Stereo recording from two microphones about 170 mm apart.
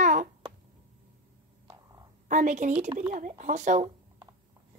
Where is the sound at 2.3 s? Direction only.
45° right (ahead or behind).